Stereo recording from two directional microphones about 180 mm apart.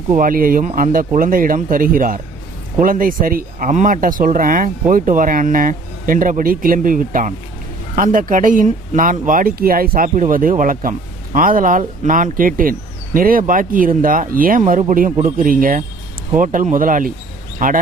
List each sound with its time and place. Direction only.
0.1 s speech: 50° right (ahead or behind)